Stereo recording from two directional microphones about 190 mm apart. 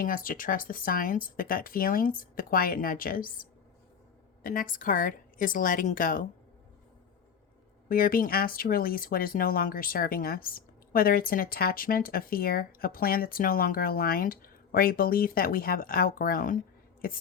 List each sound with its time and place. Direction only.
0.0 s speech: 45° left (ahead or behind)
4.4 s speech: 45° left (ahead or behind)
7.9 s speech: 50° left (ahead or behind)